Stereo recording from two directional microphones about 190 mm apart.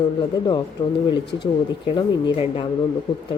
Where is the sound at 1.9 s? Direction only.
30° left (ahead or behind).